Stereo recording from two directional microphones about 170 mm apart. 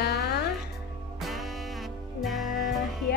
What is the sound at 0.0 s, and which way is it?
Music, 75° left (ahead or behind).